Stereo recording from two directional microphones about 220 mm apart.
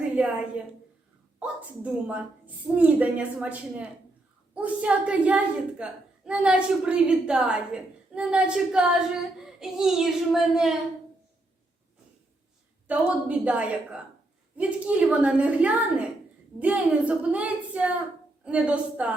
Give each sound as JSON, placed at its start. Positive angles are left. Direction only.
{"t": 0.2, "sound": "a woman's voice", "side_deg": -5}
{"t": 1.4, "sound": "a woman's voice", "side_deg": -5}
{"t": 12.9, "sound": "a woman's voice", "side_deg": -5}